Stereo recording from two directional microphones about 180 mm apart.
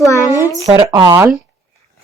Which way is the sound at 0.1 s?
20° left (ahead or behind).